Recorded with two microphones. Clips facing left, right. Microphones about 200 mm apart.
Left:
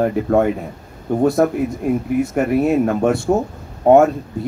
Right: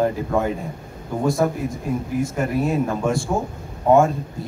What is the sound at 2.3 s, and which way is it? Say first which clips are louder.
Speech: left 6 dB; 65° left (ahead or behind).